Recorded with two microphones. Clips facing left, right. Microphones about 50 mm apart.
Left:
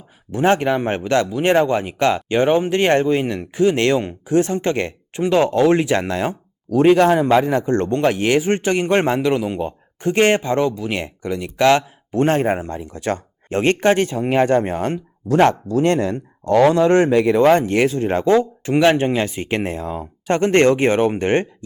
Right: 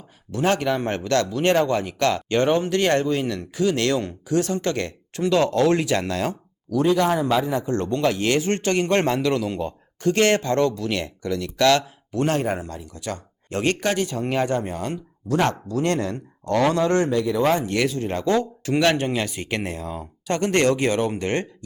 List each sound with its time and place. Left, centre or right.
0.3 s a man's voice: left
6.8 s a man's voice: left
17.2 s speech: left
17.7 s a man's voice: left